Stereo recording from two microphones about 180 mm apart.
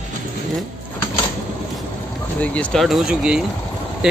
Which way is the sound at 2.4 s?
5° left (ahead or behind).